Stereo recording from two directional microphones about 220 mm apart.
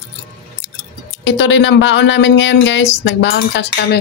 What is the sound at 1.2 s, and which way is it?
Speech, 55° left (ahead or behind).